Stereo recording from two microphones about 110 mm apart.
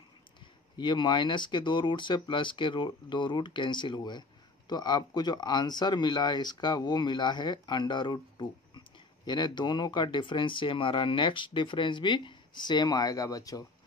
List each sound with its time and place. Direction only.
0.7 s speech: 45° left (ahead or behind)